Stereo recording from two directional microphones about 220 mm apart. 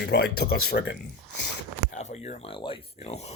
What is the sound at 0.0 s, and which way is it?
Speech, 50° left (ahead or behind).